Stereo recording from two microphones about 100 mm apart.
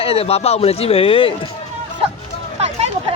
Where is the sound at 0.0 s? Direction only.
85° left; by 1.3 s 65° left (ahead or behind).